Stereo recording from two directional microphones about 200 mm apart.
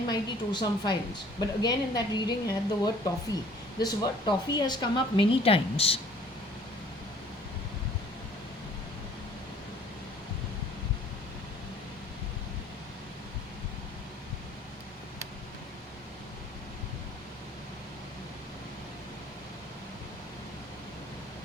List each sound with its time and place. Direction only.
0.1 s a woman's voice: 20° left (ahead or behind)